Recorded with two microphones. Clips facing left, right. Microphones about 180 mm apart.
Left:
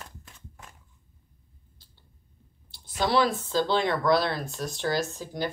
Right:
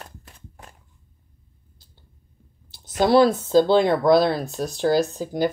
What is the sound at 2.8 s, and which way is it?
Speech, 45° right (ahead or behind).